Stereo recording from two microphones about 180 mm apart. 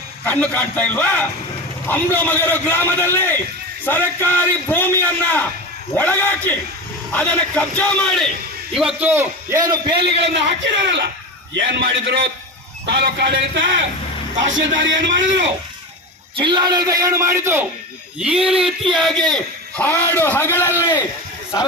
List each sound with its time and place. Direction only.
0.3 s a man's voice: 10° left (ahead or behind)
9.0 s a man's voice: 10° right (ahead or behind)
10.2 s a man's voice: 85° right
14.8 s a man's voice: 90° right
16.3 s a man's voice: 25° right (ahead or behind); by 21.0 s 15° left (ahead or behind)